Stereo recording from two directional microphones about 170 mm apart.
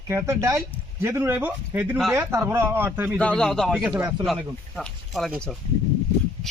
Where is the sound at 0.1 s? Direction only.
15° right (ahead or behind).